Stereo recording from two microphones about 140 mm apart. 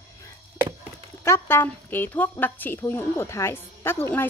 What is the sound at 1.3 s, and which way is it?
A woman's voice, 15° left (ahead or behind).